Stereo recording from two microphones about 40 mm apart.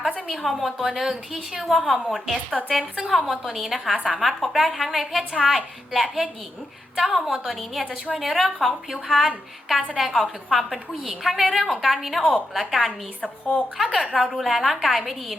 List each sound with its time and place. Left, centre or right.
0.3 s a woman's voice: centre
13.4 s a woman's voice: left
13.8 s a woman's voice: centre